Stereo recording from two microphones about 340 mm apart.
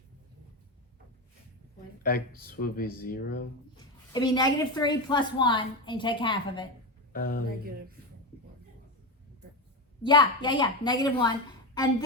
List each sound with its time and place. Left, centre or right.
2.0 s speech: left
3.8 s a woman's voice: centre
7.1 s speech: left
10.0 s a woman's voice: centre